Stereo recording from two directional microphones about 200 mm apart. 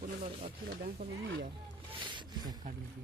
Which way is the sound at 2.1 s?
20° right (ahead or behind).